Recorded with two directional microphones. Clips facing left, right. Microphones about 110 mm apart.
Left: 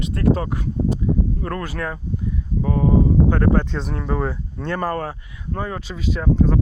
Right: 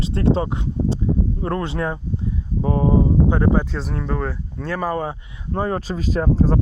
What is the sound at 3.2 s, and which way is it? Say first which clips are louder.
Speech: even; 15° right (ahead or behind).